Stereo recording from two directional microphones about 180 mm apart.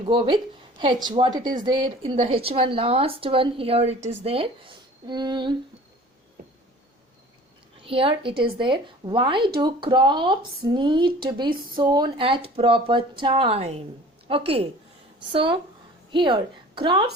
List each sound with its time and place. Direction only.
0.0 s speech: 30° right (ahead or behind)
7.8 s a woman's voice: 30° right (ahead or behind)